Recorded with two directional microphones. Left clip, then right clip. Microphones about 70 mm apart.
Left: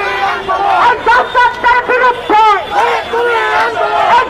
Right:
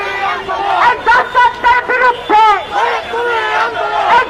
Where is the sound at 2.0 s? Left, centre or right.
Right.